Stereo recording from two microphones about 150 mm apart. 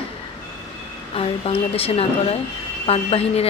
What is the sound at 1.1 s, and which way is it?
Speech, 40° left (ahead or behind).